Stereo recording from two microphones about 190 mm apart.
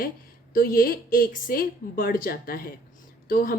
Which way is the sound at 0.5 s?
50° left (ahead or behind).